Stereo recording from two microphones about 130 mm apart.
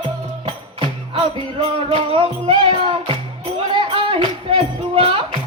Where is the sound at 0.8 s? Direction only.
45° right (ahead or behind).